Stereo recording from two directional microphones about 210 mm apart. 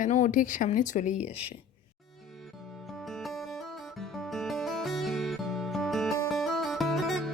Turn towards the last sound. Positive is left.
turn(degrees=0)  # may be behind; listen again after turning